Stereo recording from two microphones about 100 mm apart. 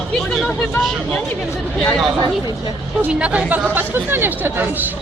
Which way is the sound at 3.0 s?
10° right (ahead or behind).